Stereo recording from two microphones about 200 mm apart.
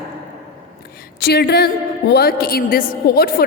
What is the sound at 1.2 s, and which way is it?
A woman's voice, 55° left (ahead or behind).